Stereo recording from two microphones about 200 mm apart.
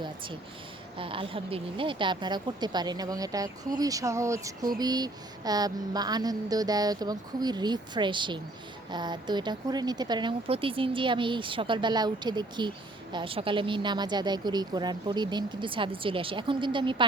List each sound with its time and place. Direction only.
0.9 s a woman's voice: 25° right (ahead or behind)